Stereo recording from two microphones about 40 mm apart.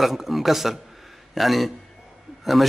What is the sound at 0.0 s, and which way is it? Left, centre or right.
A man's voice, centre.